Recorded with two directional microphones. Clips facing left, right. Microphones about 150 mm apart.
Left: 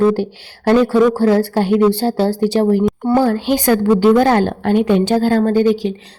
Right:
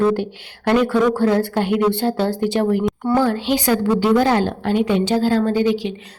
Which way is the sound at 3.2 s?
45° left (ahead or behind).